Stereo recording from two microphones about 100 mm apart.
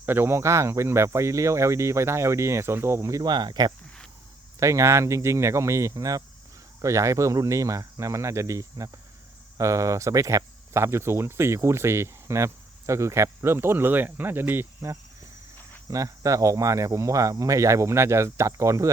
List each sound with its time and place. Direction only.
0.0 s speech: 20° right (ahead or behind)
3.2 s speech: 50° right (ahead or behind)
4.6 s speech: 30° right (ahead or behind)